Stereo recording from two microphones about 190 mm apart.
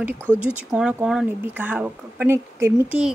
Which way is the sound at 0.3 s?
5° right (ahead or behind).